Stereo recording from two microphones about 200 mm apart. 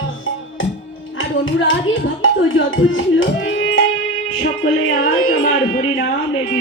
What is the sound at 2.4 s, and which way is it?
Speech, 80° left.